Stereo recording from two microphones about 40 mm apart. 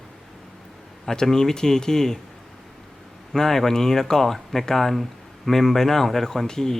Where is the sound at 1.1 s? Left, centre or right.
Centre.